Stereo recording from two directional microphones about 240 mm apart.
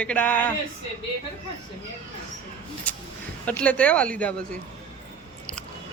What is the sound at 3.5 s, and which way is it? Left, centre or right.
Speech, centre.